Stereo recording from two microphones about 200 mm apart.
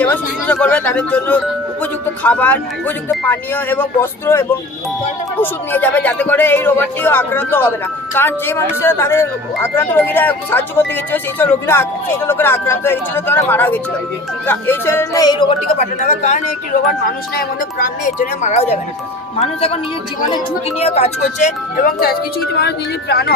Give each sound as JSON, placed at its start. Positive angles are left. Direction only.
{"t": 0.0, "sound": "speech", "side_deg": 5}
{"t": 15.8, "sound": "speech", "side_deg": 35}
{"t": 21.8, "sound": "a woman's voice", "side_deg": 50}